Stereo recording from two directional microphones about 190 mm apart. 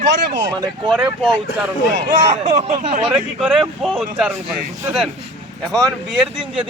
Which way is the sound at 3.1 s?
5° right (ahead or behind).